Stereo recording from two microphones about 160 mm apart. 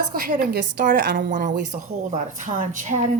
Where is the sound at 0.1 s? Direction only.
65° right (ahead or behind).